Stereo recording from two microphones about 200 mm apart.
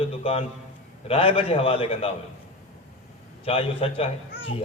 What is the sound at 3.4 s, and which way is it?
Speech, 30° left (ahead or behind).